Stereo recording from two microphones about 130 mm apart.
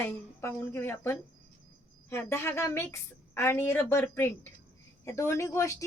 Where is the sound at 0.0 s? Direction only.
15° left (ahead or behind).